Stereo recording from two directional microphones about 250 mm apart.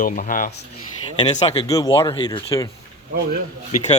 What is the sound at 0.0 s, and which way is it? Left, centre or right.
Speech, left.